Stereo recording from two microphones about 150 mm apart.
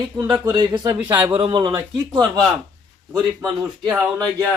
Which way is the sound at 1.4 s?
30° right (ahead or behind).